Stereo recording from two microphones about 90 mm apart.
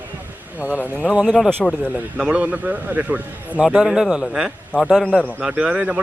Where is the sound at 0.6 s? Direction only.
20° left (ahead or behind).